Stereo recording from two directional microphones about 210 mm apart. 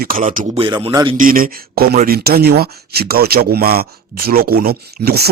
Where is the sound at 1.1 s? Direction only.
40° right (ahead or behind).